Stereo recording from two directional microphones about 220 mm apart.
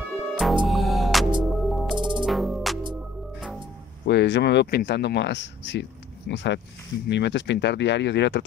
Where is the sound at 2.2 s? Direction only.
Centre (ahead or behind).